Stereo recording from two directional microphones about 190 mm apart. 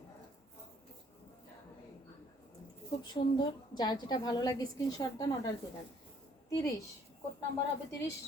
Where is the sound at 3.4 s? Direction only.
25° left (ahead or behind).